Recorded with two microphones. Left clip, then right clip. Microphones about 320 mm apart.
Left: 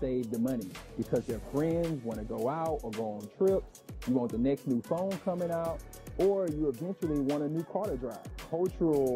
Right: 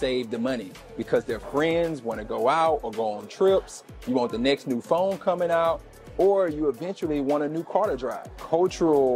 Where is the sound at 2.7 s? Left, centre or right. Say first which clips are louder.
Right 9 dB; right.